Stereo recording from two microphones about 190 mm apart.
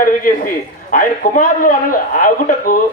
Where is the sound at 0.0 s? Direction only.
45° left (ahead or behind).